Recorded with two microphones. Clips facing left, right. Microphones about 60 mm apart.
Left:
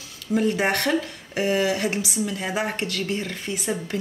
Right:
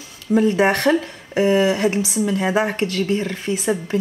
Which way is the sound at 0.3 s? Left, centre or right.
Right.